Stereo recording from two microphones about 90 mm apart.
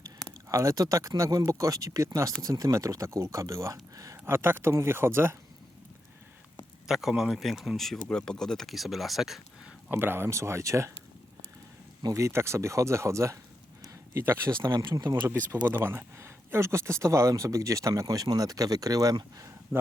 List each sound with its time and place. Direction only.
0.5 s speech: 35° right (ahead or behind)
4.3 s speech: 25° right (ahead or behind)
6.8 s speech: 5° right (ahead or behind)
9.9 s speech: 25° right (ahead or behind)
12.1 s speech: 30° right (ahead or behind)
19.7 s a sound: 5° right (ahead or behind)